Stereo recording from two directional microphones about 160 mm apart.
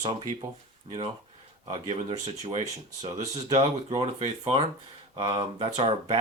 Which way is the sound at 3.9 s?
40° right (ahead or behind).